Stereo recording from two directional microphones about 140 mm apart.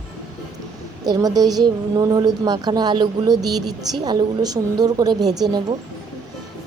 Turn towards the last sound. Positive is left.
turn(degrees=-30)  # may be behind; listen again after turning